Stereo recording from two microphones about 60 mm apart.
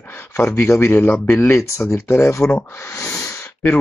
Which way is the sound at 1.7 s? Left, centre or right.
Left.